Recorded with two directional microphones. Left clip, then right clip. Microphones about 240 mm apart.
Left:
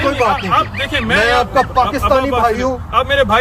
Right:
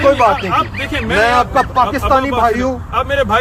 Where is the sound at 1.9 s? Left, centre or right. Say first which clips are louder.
Even; centre.